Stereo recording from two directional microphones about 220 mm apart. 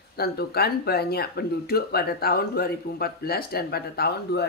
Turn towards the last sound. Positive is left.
turn(degrees=45)  # may be behind; listen again after turning